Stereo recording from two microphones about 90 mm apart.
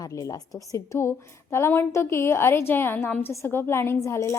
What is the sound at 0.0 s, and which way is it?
A woman's voice, 40° left (ahead or behind).